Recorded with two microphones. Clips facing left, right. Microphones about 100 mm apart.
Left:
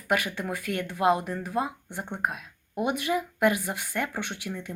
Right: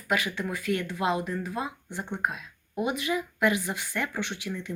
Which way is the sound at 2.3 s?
55° left (ahead or behind).